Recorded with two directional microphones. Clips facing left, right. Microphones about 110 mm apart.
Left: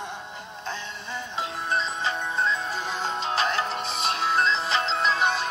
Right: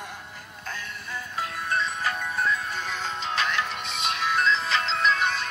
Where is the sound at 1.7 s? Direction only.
25° left (ahead or behind).